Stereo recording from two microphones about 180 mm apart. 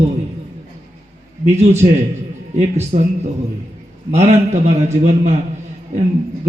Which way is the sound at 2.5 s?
40° right (ahead or behind).